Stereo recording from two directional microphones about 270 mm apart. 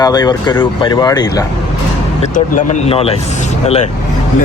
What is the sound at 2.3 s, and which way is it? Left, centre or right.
Speech, left.